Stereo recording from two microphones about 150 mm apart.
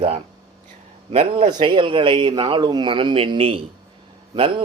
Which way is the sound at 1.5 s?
30° right (ahead or behind).